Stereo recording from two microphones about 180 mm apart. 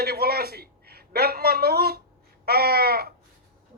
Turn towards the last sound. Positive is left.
turn(degrees=-60)  # may be behind; listen again after turning